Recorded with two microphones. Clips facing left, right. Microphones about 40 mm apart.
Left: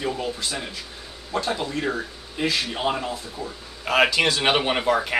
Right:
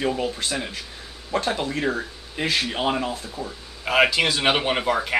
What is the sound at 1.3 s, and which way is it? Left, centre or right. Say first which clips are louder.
Speech: right 2 dB; right.